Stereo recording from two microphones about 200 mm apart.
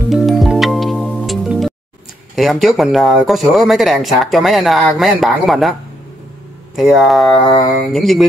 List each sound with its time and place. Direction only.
0.1 s music: centre (ahead or behind)
2.3 s speech: centre (ahead or behind)
7.4 s mantra: 20° left (ahead or behind)
7.9 s speech: centre (ahead or behind)